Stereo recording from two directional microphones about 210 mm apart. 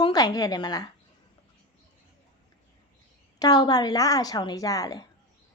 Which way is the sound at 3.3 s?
20° left (ahead or behind).